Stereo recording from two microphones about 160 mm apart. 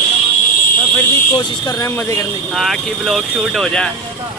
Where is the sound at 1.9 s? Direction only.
15° left (ahead or behind).